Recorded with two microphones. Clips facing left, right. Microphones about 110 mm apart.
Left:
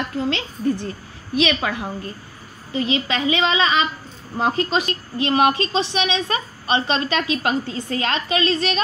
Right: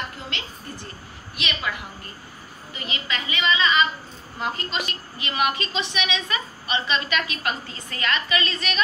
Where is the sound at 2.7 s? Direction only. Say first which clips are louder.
Left 10 dB; 90° left.